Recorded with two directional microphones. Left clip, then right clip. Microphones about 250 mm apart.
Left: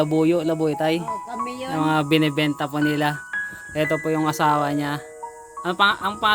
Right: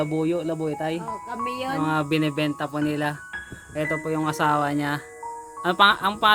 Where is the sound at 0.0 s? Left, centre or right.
Left; by 4.9 s centre.